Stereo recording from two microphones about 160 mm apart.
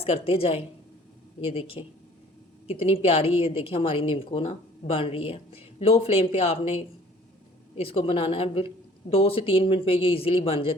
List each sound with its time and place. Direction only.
0.0 s speech: 35° left (ahead or behind)